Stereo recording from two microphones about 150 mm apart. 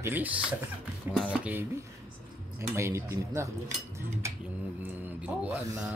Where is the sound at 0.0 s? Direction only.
10° right (ahead or behind).